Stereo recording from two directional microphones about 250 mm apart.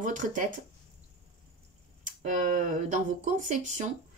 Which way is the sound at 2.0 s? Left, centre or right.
Right.